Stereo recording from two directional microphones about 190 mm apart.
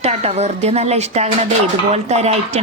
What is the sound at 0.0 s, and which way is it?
A woman's voice, 35° right (ahead or behind).